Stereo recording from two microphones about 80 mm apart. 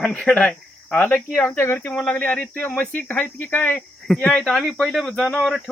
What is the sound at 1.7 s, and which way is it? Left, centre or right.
Speech, left.